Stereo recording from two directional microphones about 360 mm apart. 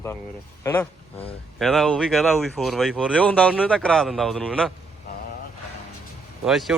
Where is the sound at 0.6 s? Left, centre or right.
Centre.